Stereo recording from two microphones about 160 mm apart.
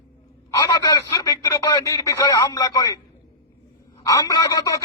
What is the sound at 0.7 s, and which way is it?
Speech, 20° left (ahead or behind).